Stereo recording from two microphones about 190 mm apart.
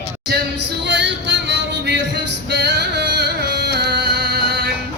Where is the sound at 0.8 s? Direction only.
70° right (ahead or behind).